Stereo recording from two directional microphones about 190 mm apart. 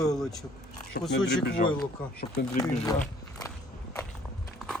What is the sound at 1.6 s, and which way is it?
Speech, 45° left (ahead or behind).